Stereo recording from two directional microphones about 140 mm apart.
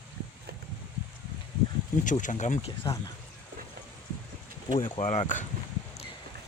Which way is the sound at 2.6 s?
45° left (ahead or behind).